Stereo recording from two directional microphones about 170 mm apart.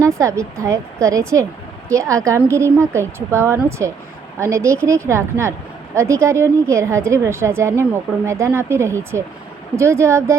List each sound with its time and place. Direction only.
0.0 s a woman's voice: 15° right (ahead or behind)